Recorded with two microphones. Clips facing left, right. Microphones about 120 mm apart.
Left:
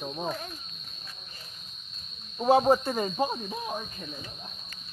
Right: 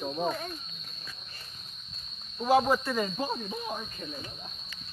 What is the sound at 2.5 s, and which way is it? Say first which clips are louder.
Speech: left 3 dB; 30° left (ahead or behind).